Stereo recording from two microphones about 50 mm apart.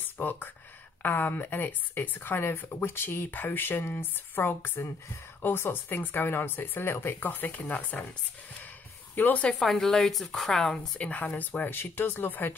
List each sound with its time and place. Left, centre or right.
0.2 s speech: left
7.2 s speech: left
9.1 s speech: left
9.6 s a woman's voice: centre
11.0 s speech: left